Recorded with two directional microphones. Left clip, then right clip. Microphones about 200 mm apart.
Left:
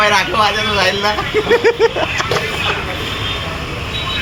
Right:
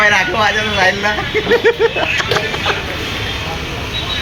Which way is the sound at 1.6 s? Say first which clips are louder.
Even; 15° left (ahead or behind).